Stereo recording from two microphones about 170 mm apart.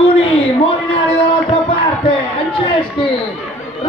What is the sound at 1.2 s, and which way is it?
Music, 30° left (ahead or behind).